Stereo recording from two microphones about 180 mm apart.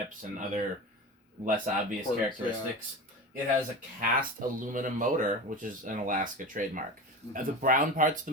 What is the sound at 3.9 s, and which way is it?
Speech, 45° right (ahead or behind).